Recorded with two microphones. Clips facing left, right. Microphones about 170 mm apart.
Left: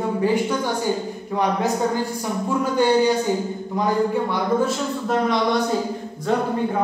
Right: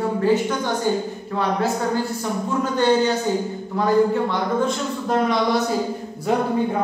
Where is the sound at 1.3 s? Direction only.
15° left (ahead or behind).